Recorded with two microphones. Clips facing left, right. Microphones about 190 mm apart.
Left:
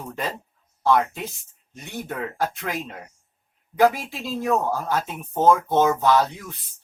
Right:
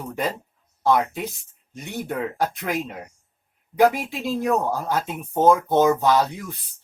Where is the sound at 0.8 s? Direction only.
15° right (ahead or behind).